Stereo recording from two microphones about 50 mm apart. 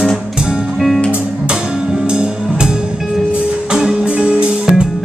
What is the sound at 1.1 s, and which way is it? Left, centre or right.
Music, centre.